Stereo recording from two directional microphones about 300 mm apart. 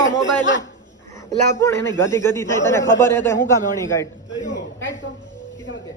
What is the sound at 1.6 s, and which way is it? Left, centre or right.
A man's voice, centre.